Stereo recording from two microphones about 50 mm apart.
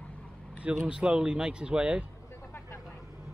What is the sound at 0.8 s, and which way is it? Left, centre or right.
Speech, centre.